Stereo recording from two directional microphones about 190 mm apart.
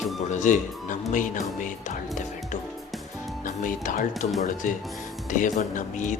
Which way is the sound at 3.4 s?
45° left (ahead or behind).